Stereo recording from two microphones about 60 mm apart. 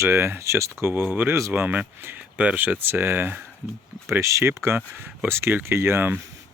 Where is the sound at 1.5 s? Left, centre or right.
Right.